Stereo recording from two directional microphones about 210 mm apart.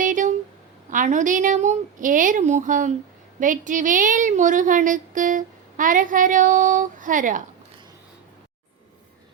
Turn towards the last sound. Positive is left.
turn(degrees=-40)  # may be behind; listen again after turning